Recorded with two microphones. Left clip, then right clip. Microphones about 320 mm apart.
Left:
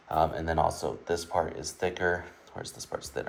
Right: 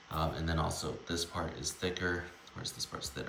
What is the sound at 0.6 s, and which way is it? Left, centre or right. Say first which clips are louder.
Speech: left 12 dB; centre.